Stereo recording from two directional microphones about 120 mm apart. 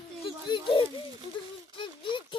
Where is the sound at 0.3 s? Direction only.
45° left (ahead or behind).